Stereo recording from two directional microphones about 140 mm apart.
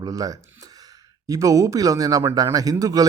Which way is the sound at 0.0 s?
25° right (ahead or behind).